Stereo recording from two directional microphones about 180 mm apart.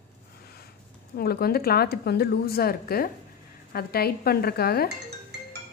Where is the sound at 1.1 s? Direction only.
60° left (ahead or behind).